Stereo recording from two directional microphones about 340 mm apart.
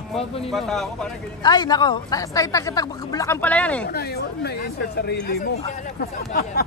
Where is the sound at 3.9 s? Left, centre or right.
Left.